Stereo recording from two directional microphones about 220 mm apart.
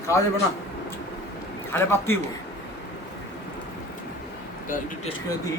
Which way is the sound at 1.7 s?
10° left (ahead or behind).